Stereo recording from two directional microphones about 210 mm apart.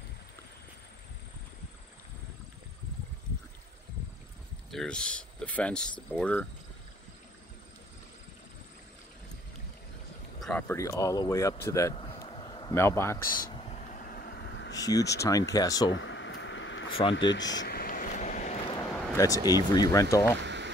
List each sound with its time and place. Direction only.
4.6 s speech: 5° left (ahead or behind)
10.4 s speech: 10° left (ahead or behind)
11.9 s a sound: 20° left (ahead or behind)
13.5 s vehicle: 30° left (ahead or behind); by 14.9 s 60° left (ahead or behind)
15.2 s speech: 15° left (ahead or behind)
15.9 s a sound: 60° left (ahead or behind)
17.1 s speech: 60° left (ahead or behind)
17.6 s a sound: 45° left (ahead or behind); by 19.5 s 15° left (ahead or behind)
19.7 s speech: 15° left (ahead or behind)
20.4 s boiling: 55° right (ahead or behind)